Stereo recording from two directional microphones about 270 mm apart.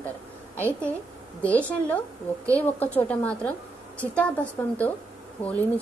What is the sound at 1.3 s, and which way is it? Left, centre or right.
A woman's voice, centre.